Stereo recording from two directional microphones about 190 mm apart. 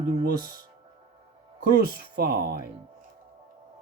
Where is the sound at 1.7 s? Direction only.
50° right (ahead or behind).